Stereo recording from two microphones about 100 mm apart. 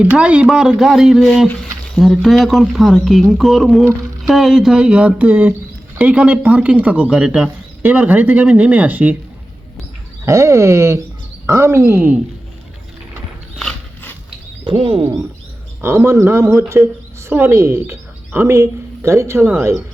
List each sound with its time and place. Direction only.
0.0 s a man's voice: 15° right (ahead or behind)
10.2 s a woman's voice: 30° right (ahead or behind)
14.6 s speech: 55° right (ahead or behind)
15.8 s a woman's voice: 25° right (ahead or behind)